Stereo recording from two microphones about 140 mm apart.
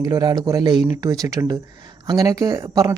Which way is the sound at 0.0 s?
30° right (ahead or behind).